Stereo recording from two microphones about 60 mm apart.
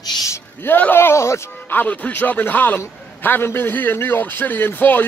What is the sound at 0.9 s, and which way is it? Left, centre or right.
Speech, left.